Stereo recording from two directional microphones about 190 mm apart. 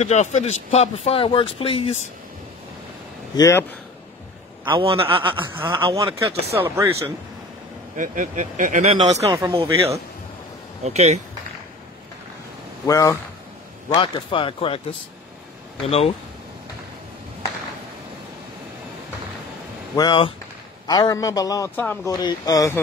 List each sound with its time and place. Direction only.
0.0 s speech: 35° left (ahead or behind)
3.3 s speech: 15° left (ahead or behind)
4.6 s a man's voice: 30° right (ahead or behind)
6.5 s speech: 15° right (ahead or behind)
7.9 s speech: 40° right (ahead or behind)
9.2 s speech: 15° right (ahead or behind)
9.5 s a man's voice: 30° right (ahead or behind)
12.8 s a man's voice: 15° left (ahead or behind)
15.8 s speech: 30° left (ahead or behind)
20.0 s a man's voice: 25° left (ahead or behind)